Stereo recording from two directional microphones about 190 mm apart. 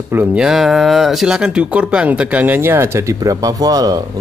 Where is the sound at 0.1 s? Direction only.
5° right (ahead or behind).